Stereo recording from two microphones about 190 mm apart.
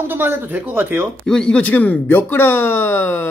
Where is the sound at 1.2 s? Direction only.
5° left (ahead or behind).